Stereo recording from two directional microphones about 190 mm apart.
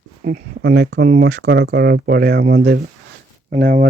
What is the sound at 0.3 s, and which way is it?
Speech, 60° right (ahead or behind).